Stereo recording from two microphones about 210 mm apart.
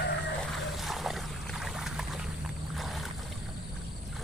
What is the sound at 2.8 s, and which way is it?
Boat, centre (ahead or behind).